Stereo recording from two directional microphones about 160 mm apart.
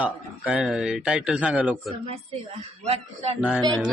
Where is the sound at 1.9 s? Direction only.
35° right (ahead or behind).